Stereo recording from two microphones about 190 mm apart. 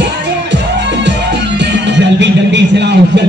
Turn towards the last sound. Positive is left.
turn(degrees=-65)  # may be behind; listen again after turning